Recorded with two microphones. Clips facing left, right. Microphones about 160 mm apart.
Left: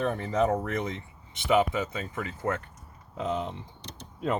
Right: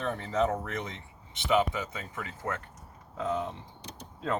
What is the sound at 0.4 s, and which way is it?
Speech, 40° left (ahead or behind).